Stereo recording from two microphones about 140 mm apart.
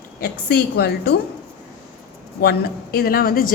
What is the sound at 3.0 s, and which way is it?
Speech, 90° left.